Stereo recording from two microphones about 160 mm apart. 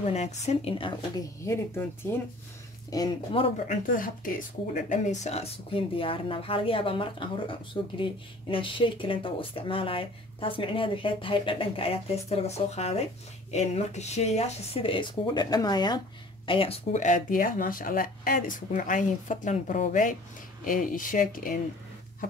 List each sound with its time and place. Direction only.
0.0 s speech: 45° left (ahead or behind)
1.4 s speech: 15° left (ahead or behind)
3.6 s speech: 60° left (ahead or behind)
4.8 s speech: 50° left (ahead or behind); by 16.0 s 25° left (ahead or behind)
16.4 s speech: 35° left (ahead or behind); by 21.5 s 60° left (ahead or behind)